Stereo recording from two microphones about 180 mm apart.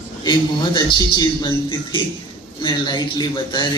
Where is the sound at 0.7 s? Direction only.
25° left (ahead or behind).